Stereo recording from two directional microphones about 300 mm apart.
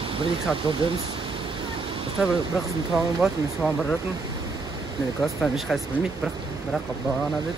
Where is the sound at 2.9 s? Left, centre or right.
Centre.